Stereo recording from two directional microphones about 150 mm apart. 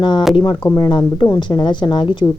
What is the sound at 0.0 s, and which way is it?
Speech, 30° left (ahead or behind).